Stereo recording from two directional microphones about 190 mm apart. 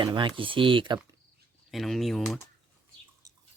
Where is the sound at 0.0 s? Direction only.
25° right (ahead or behind).